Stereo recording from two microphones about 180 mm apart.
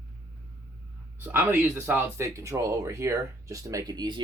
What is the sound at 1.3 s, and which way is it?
Speech, 10° right (ahead or behind).